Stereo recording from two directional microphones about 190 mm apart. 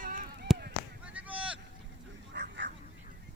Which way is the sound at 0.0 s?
45° right (ahead or behind).